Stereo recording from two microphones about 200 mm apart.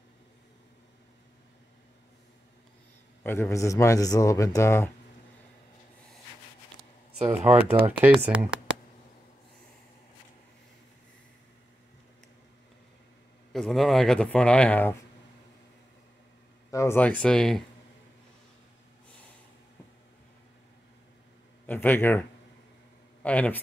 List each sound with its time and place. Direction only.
3.3 s speech: 15° left (ahead or behind)
7.3 s speech: 30° right (ahead or behind)
8.0 s speech: 5° right (ahead or behind)
13.5 s speech: centre (ahead or behind)
16.7 s speech: 10° left (ahead or behind)
21.6 s speech: 10° left (ahead or behind)
23.2 s speech: 5° left (ahead or behind)